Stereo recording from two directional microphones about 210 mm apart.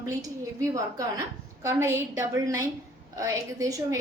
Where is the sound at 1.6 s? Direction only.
15° right (ahead or behind).